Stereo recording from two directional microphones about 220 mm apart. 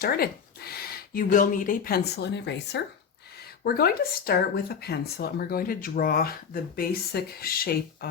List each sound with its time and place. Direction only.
0.0 s speech: 45° left (ahead or behind)